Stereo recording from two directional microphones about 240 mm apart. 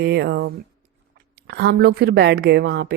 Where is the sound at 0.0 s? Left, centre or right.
Right.